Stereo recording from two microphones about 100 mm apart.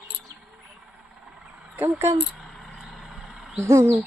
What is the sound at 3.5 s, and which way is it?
Speech, 25° right (ahead or behind).